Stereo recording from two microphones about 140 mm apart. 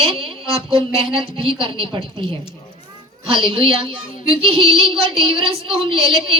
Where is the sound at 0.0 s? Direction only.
40° right (ahead or behind).